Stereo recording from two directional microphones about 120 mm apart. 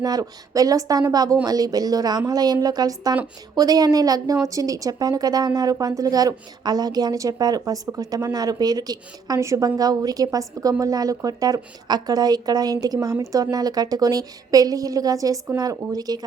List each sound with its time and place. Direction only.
0.0 s a woman's voice: 30° right (ahead or behind)